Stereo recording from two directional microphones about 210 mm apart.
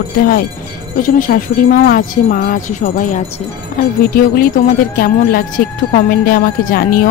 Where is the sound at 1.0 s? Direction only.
40° left (ahead or behind).